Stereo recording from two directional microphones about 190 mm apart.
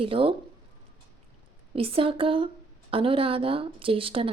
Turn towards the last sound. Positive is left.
turn(degrees=-30)  # may be behind; listen again after turning